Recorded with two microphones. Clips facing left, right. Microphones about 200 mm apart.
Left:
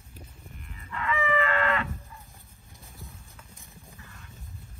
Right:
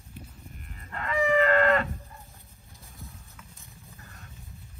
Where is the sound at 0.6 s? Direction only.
45° right (ahead or behind).